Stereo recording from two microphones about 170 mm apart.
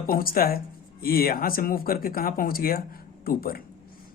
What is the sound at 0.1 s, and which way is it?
Speech, 60° left (ahead or behind).